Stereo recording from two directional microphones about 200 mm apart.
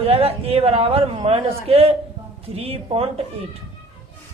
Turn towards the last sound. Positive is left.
turn(degrees=-30)  # may be behind; listen again after turning